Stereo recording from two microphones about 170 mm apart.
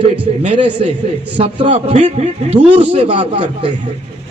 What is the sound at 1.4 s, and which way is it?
A man's voice, 35° right (ahead or behind).